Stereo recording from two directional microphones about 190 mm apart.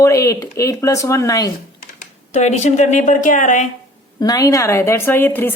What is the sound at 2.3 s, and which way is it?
Speech, 35° left (ahead or behind).